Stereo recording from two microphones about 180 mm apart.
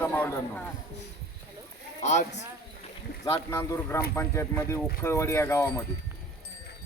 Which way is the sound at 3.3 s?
15° left (ahead or behind).